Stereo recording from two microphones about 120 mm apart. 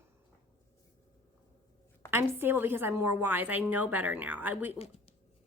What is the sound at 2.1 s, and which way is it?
A woman's voice, 20° right (ahead or behind).